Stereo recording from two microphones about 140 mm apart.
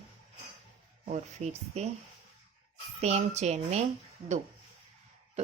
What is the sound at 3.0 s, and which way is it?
Speech, 50° right (ahead or behind).